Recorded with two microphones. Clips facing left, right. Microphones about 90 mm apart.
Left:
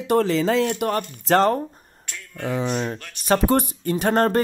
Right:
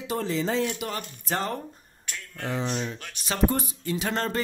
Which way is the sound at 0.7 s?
55° left (ahead or behind).